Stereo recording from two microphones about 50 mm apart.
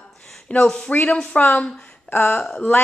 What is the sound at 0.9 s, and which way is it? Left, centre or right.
Speech, left.